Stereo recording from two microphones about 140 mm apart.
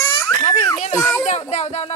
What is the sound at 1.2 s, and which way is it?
Speech, 55° left (ahead or behind).